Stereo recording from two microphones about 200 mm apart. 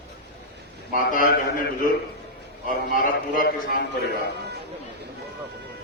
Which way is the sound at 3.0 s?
40° left (ahead or behind).